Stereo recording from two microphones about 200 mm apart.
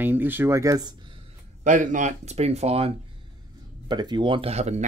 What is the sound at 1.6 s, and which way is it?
Speech, 40° right (ahead or behind).